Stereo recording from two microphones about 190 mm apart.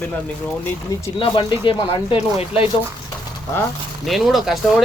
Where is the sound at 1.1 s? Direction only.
25° left (ahead or behind).